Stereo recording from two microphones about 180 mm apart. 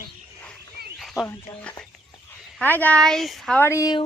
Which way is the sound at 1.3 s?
10° left (ahead or behind).